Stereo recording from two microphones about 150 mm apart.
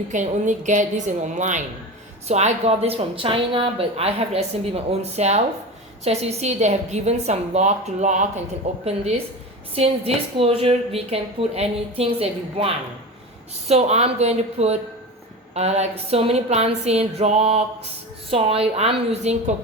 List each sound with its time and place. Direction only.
0.1 s a woman's voice: 55° right (ahead or behind)